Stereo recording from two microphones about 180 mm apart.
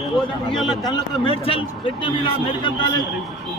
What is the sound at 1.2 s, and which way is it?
A man's voice, 30° left (ahead or behind).